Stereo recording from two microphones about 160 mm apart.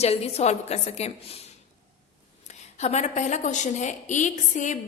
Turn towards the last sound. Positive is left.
turn(degrees=50)  # may be behind; listen again after turning